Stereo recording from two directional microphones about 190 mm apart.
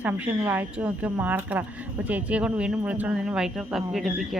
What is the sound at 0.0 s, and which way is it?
A woman's voice, 10° right (ahead or behind).